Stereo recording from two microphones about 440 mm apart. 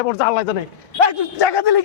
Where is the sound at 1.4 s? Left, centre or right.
Left.